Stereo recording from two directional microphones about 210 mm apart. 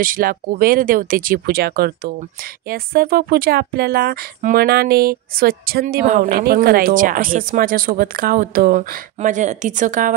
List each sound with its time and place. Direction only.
0.0 s speech: 40° right (ahead or behind)